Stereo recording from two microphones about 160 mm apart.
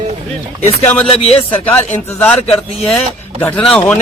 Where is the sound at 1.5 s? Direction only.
10° left (ahead or behind).